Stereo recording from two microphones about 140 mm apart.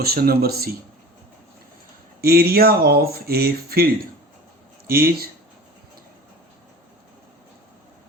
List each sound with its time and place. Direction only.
0.0 s speech: 90° right
2.2 s speech: 90° right